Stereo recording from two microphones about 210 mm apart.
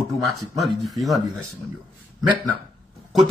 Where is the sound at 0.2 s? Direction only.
Centre (ahead or behind).